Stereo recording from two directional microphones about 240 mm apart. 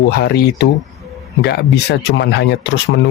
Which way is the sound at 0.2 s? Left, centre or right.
Left.